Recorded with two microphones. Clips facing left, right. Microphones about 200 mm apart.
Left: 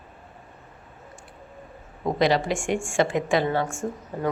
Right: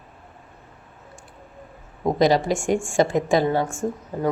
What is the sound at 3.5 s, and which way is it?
Speech, 15° right (ahead or behind).